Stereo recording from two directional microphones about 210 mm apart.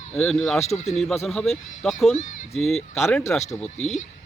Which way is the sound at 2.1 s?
35° left (ahead or behind).